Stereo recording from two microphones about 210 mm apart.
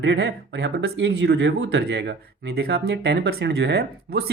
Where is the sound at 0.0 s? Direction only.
55° right (ahead or behind).